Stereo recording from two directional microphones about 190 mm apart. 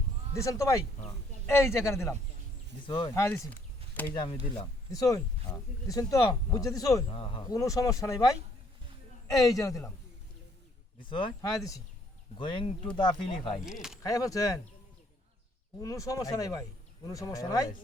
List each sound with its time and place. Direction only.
0.3 s speech: 15° left (ahead or behind)
2.8 s speech: 25° left (ahead or behind)
3.2 s a sound: 15° left (ahead or behind)
4.1 s speech: 25° left (ahead or behind)
7.1 s speech: 30° left (ahead or behind)
7.4 s speech: 15° left (ahead or behind)
9.4 s speech: 20° left (ahead or behind)
11.1 s speech: 25° left (ahead or behind)
14.0 s speech: 20° left (ahead or behind)
15.8 s speech: 15° left (ahead or behind)